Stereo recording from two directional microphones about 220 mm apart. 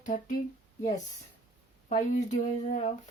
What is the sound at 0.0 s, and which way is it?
Speech, 35° left (ahead or behind).